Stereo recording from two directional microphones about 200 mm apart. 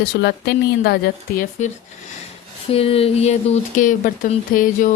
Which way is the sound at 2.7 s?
30° left (ahead or behind).